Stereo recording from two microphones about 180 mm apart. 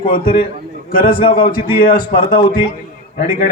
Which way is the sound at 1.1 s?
30° left (ahead or behind).